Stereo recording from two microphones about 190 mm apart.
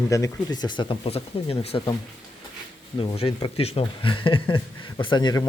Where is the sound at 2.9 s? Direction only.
30° left (ahead or behind).